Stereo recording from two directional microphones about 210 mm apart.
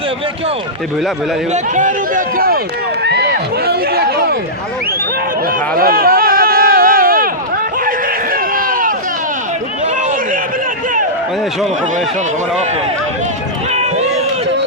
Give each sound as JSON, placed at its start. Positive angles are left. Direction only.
{"t": 1.5, "sound": "a man's voice", "side_deg": -35}
{"t": 3.0, "sound": "run", "side_deg": -50}
{"t": 5.5, "sound": "a sound", "side_deg": -45}
{"t": 13.7, "sound": "run", "side_deg": -30}